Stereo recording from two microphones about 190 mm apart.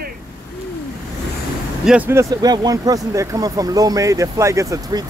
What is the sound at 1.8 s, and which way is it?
Speech, 10° right (ahead or behind).